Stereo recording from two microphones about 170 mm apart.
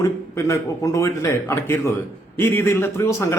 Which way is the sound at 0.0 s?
20° left (ahead or behind).